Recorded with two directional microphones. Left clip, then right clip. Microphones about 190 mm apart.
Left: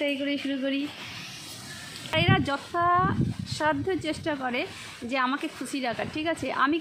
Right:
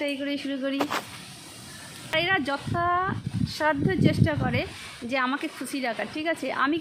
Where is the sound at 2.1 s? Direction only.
5° right (ahead or behind).